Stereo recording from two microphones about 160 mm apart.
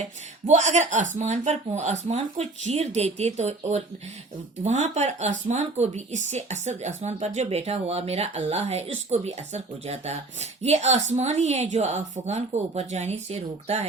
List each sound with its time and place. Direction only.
0.4 s speech: 45° right (ahead or behind)